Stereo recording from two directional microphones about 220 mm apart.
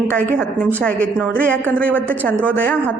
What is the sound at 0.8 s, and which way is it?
A woman's voice, 5° left (ahead or behind).